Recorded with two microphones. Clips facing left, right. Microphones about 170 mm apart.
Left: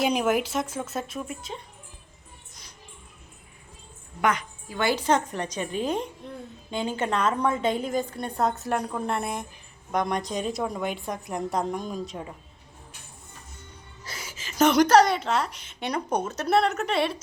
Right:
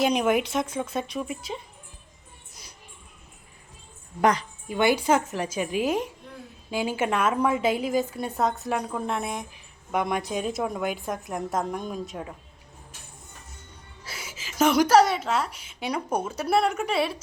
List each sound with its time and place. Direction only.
0.0 s a woman's voice: 5° left (ahead or behind)
4.2 s a woman's voice: 35° right (ahead or behind)
4.7 s a woman's voice: 15° right (ahead or behind)
14.0 s a woman's voice: 5° right (ahead or behind)